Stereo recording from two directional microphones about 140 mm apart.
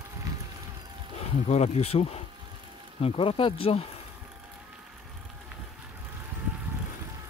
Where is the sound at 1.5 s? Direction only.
50° left (ahead or behind).